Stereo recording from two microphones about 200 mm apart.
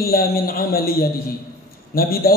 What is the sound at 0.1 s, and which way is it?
A man's voice, 50° left (ahead or behind).